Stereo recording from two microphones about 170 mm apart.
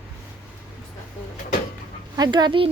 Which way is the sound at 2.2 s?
25° right (ahead or behind).